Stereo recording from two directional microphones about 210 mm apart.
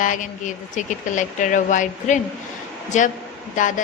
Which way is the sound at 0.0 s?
35° left (ahead or behind).